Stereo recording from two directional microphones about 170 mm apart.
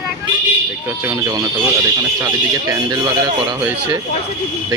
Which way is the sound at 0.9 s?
20° right (ahead or behind).